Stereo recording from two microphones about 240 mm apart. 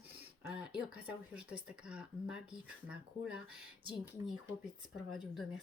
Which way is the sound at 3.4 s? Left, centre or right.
Right.